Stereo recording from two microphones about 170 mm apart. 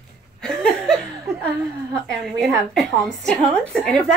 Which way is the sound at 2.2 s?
Centre (ahead or behind).